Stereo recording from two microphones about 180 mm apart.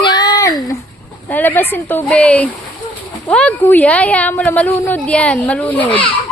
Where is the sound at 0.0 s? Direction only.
25° left (ahead or behind).